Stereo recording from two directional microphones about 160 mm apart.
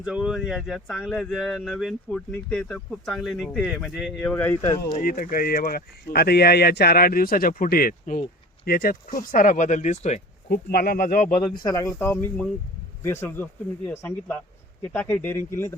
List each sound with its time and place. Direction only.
0.0 s speech: 5° right (ahead or behind)
4.2 s speech: 10° left (ahead or behind)
4.5 s speech: 30° left (ahead or behind)
5.0 s speech: 60° left (ahead or behind); by 10.2 s 45° left (ahead or behind)
10.5 s speech: 75° left (ahead or behind)
11.5 s speech: 20° left (ahead or behind)